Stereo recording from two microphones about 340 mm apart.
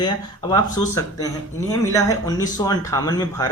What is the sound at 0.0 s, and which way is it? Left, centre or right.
Speech, centre.